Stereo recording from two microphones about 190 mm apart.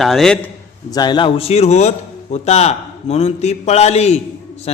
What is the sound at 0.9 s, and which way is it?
A man's voice, 20° left (ahead or behind).